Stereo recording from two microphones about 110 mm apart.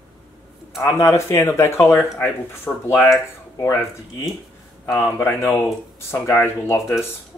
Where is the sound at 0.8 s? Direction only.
25° left (ahead or behind).